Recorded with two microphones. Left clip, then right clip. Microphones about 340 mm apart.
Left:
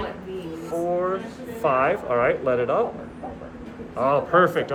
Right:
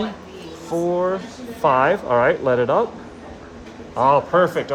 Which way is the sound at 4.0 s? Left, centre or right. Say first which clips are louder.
Right 3 dB; centre.